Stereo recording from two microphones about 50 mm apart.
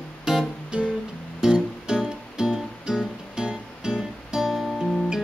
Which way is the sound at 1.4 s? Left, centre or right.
Centre.